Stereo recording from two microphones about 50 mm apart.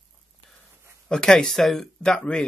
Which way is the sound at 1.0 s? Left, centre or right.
Centre.